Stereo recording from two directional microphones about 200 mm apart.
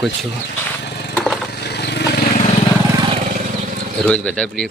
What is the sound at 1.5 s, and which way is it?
Vehicle, 55° left (ahead or behind).